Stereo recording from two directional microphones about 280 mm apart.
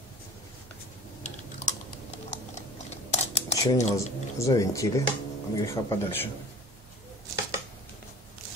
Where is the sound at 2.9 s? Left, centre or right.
Left.